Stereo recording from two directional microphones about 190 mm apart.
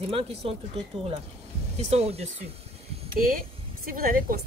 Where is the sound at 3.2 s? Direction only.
50° right (ahead or behind).